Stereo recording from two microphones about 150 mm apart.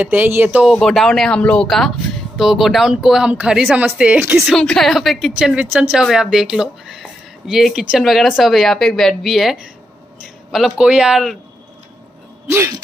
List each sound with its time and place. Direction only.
0.0 s speech: 10° right (ahead or behind)
0.7 s a woman's voice: centre (ahead or behind)
4.4 s a woman's voice: centre (ahead or behind)
12.4 s speech: 15° right (ahead or behind)